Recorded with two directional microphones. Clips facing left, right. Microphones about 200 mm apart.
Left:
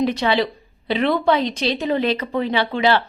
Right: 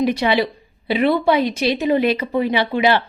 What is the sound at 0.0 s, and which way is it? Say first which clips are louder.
A woman's voice: right 1 dB; 10° right (ahead or behind).